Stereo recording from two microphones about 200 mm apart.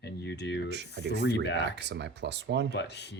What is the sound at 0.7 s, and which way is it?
Speech, 60° right (ahead or behind).